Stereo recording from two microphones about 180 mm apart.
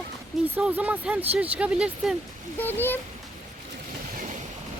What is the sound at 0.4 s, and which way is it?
Speech, 10° right (ahead or behind).